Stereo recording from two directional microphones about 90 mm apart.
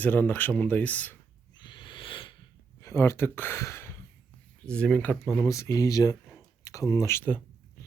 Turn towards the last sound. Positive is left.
turn(degrees=25)  # may be behind; listen again after turning